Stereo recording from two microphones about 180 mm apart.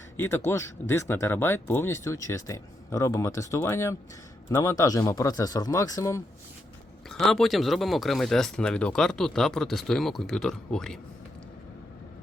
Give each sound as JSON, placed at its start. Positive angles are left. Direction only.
{"t": 0.2, "sound": "a man's voice", "side_deg": 15}
{"t": 7.1, "sound": "speech", "side_deg": 0}